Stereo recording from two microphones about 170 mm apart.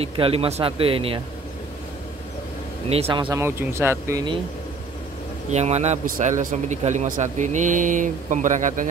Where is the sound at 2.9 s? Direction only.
35° right (ahead or behind).